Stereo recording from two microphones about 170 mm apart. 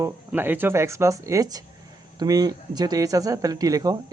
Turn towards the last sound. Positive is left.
turn(degrees=-20)  # may be behind; listen again after turning